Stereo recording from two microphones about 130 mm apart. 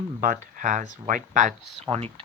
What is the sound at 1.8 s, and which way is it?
Speech, 50° right (ahead or behind).